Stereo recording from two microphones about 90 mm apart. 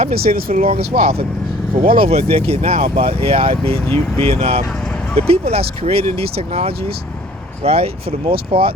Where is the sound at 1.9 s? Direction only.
90° right.